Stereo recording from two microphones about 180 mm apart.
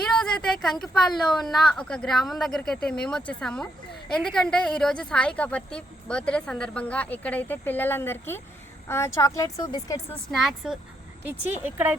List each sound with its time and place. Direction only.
0.2 s a woman's voice: 5° left (ahead or behind); by 10.0 s 20° left (ahead or behind)
10.3 s a woman's voice: centre (ahead or behind)